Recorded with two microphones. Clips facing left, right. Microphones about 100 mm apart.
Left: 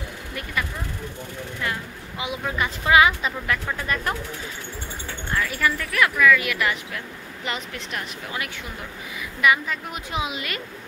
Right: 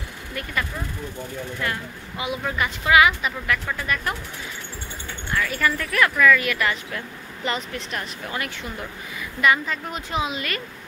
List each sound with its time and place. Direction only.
1.6 s a woman's voice: 20° left (ahead or behind)
5.3 s speech: 15° left (ahead or behind)